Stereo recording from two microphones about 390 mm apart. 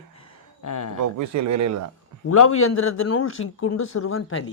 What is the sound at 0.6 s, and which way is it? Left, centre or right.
Speech, left.